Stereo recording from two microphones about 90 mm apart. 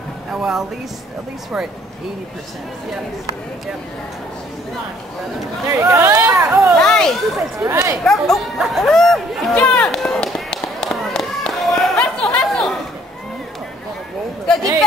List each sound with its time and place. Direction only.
0.3 s speech: 5° right (ahead or behind)
5.7 s speech: 30° right (ahead or behind)
6.8 s a sound: 5° left (ahead or behind)
7.6 s speech: 35° right (ahead or behind)
8.0 s speech: 5° left (ahead or behind)
9.8 s a sound: 5° left (ahead or behind)